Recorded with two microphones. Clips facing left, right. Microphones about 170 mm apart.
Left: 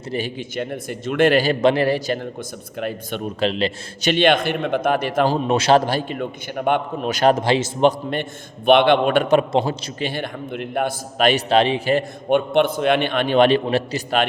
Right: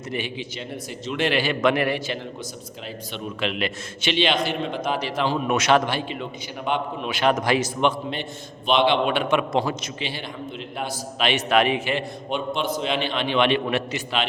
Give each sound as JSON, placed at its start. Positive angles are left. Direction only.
{"t": 0.1, "sound": "a man's voice", "side_deg": 40}
{"t": 2.8, "sound": "a man's voice", "side_deg": 50}
{"t": 4.1, "sound": "a man's voice", "side_deg": 55}
{"t": 5.5, "sound": "a man's voice", "side_deg": 30}
{"t": 8.1, "sound": "a man's voice", "side_deg": 55}
{"t": 10.0, "sound": "a man's voice", "side_deg": 50}
{"t": 11.4, "sound": "a man's voice", "side_deg": 30}
{"t": 11.9, "sound": "a man's voice", "side_deg": 60}